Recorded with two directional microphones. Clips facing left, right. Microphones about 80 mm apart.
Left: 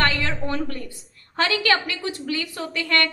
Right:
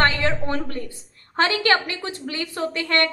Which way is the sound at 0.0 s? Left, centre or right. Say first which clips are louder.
Right 3 dB; right.